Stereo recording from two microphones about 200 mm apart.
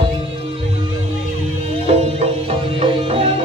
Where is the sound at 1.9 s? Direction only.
30° right (ahead or behind).